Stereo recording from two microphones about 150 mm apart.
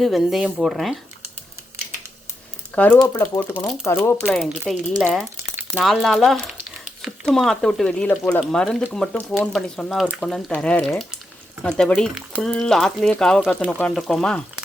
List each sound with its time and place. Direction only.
0.0 s speech: centre (ahead or behind)
2.7 s speech: 10° left (ahead or behind)
4.4 s speech: 5° right (ahead or behind); by 8.4 s 15° left (ahead or behind)
8.4 s speech: 5° left (ahead or behind)